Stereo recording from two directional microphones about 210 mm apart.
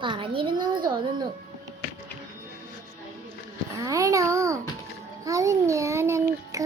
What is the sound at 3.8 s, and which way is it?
A child's voice, 15° right (ahead or behind).